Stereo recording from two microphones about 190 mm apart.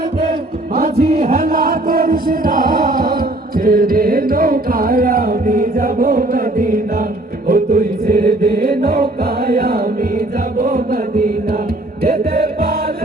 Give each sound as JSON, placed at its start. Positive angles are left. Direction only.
{"t": 0.8, "sound": "music", "side_deg": -55}
{"t": 1.3, "sound": "chant", "side_deg": -50}
{"t": 3.6, "sound": "music", "side_deg": -50}
{"t": 7.4, "sound": "chant", "side_deg": -50}
{"t": 9.5, "sound": "music", "side_deg": -55}